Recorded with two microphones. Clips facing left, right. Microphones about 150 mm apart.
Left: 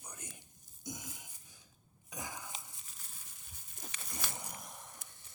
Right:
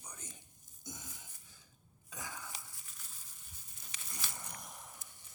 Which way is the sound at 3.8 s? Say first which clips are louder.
Left 5 dB; 50° left (ahead or behind).